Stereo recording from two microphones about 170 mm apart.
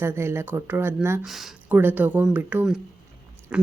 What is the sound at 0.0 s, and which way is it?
Speech, 15° right (ahead or behind).